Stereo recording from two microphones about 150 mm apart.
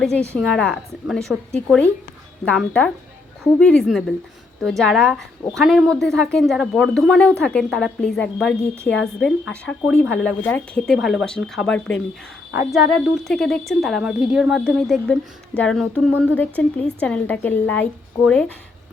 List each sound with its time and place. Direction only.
0.0 s a woman's voice: 5° left (ahead or behind)